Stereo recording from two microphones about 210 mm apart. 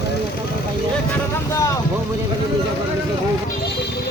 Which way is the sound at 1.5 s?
15° left (ahead or behind).